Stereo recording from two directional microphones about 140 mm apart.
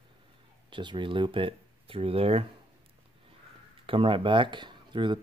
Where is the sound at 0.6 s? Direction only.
35° right (ahead or behind).